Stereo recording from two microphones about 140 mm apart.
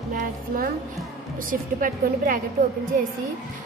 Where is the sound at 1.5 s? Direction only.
80° right.